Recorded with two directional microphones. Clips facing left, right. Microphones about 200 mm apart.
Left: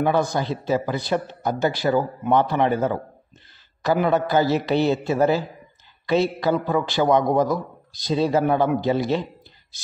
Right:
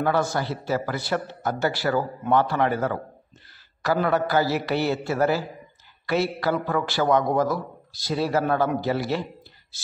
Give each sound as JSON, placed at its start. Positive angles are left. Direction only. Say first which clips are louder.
{"t": 0.0, "sound": "a man's voice", "louder": "left 2 dB", "side_deg": 15}